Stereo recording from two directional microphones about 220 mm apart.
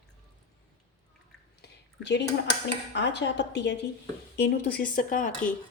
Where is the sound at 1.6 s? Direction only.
50° left (ahead or behind).